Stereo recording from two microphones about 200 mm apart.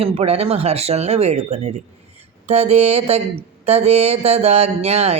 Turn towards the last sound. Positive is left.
turn(degrees=-30)  # may be behind; listen again after turning